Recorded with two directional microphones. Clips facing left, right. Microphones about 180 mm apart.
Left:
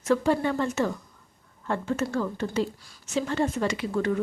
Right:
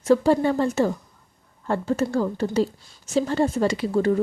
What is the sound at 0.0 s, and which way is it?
Speech, 35° right (ahead or behind).